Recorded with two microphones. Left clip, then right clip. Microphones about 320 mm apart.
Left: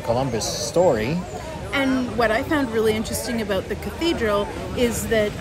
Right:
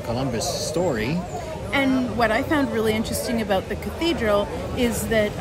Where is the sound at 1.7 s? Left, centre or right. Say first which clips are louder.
Even; centre.